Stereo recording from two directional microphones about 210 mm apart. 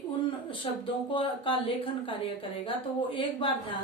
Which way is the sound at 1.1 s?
25° left (ahead or behind).